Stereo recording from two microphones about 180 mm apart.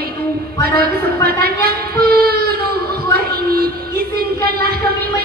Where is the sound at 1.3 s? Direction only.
60° right (ahead or behind).